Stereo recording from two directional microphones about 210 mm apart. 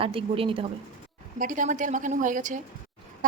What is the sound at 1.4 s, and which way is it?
A woman's voice, 40° right (ahead or behind).